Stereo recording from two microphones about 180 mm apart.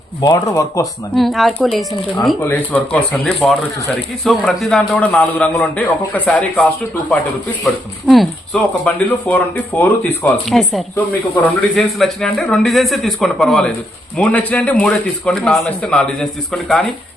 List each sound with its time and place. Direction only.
0.2 s speech: 20° left (ahead or behind)
1.1 s speech: centre (ahead or behind)
2.4 s speech: 10° left (ahead or behind)